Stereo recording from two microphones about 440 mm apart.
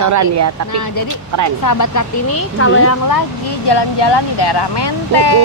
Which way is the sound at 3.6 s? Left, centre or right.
Left.